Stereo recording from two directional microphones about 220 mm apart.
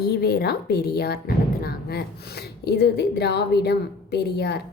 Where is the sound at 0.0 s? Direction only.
45° left (ahead or behind).